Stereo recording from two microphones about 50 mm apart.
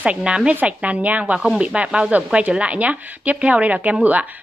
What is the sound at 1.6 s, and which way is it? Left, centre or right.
Speech, right.